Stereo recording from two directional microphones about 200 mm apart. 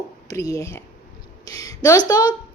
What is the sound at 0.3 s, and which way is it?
A woman's voice, 15° left (ahead or behind).